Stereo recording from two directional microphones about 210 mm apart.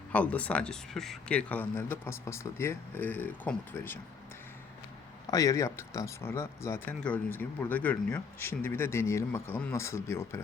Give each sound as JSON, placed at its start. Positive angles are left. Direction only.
{"t": 0.1, "sound": "speech", "side_deg": 5}
{"t": 5.3, "sound": "speech", "side_deg": 15}